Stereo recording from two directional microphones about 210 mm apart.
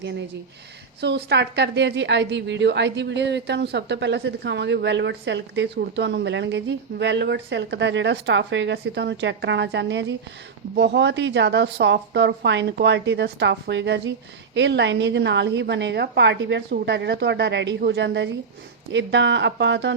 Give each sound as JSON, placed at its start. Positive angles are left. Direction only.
{"t": 1.0, "sound": "a woman's voice", "side_deg": -55}